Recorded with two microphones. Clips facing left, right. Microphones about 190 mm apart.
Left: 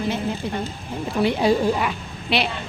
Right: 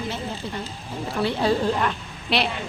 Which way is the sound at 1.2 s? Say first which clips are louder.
Left 3 dB; 15° left (ahead or behind).